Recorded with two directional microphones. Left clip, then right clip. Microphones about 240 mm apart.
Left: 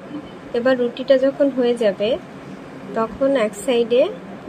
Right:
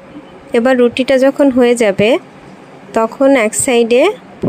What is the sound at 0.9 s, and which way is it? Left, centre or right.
Speech, right.